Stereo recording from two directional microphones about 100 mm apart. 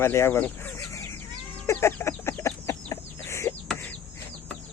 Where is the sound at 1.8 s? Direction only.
25° left (ahead or behind).